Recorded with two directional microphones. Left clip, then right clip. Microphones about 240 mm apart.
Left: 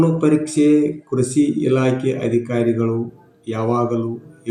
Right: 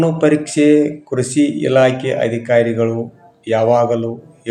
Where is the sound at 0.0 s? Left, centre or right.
Centre.